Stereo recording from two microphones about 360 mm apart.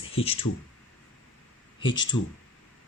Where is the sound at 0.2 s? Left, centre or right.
Centre.